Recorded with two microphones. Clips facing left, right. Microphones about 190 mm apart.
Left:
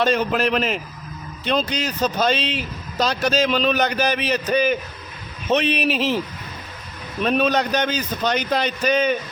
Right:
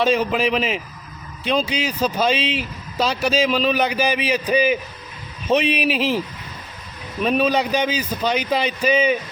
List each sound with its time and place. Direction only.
0.0 s speech: centre (ahead or behind)